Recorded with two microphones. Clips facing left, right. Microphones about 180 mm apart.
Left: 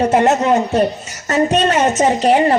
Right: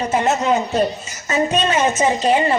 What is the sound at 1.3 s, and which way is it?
A man's voice, 70° left (ahead or behind).